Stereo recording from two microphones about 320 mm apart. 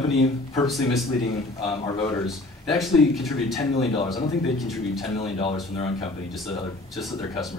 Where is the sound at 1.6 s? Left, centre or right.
Centre.